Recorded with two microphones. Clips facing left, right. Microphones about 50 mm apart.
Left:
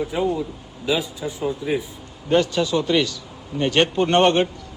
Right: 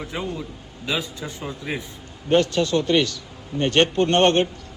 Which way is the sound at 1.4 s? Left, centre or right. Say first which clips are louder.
Left 7 dB; centre.